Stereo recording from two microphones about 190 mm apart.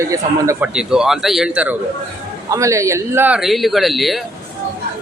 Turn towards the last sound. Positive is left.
turn(degrees=0)  # may be behind; listen again after turning